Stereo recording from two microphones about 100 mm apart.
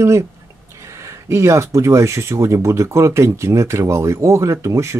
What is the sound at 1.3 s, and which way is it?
Speech, 30° right (ahead or behind).